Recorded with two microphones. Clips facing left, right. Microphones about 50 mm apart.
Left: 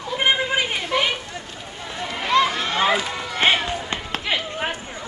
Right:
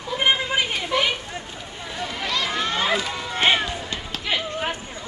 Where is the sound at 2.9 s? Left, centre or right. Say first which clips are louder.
Left 2 dB; centre.